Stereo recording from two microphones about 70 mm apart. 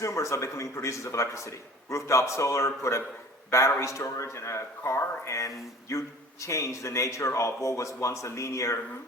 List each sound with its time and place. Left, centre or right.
0.0 s a man's voice: left